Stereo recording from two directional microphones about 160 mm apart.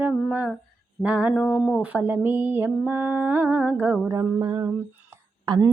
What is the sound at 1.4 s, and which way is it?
Speech, 15° left (ahead or behind).